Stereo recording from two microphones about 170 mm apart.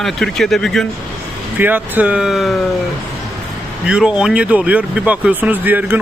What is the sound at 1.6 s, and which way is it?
Speech, 10° right (ahead or behind).